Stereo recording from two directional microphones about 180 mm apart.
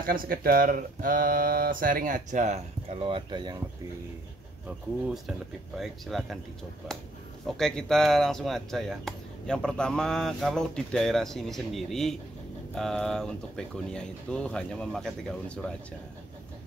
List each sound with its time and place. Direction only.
0.0 s speech: 55° right (ahead or behind); by 3.6 s 25° right (ahead or behind)
4.6 s speech: 5° right (ahead or behind)
7.4 s speech: centre (ahead or behind)